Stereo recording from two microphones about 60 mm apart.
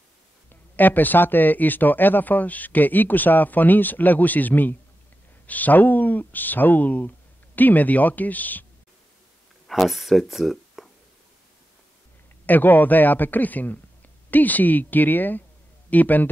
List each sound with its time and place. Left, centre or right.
0.5 s speech: left
9.7 s speech: centre
12.4 s speech: left